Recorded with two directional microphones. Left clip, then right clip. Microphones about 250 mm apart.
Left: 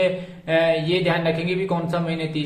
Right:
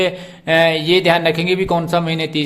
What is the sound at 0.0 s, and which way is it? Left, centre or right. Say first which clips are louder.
Speech: right 3 dB; right.